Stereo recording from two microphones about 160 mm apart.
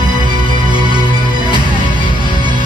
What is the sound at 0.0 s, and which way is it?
Music, 25° right (ahead or behind).